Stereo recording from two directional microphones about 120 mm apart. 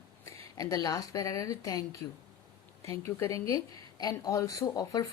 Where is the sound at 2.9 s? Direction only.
25° left (ahead or behind).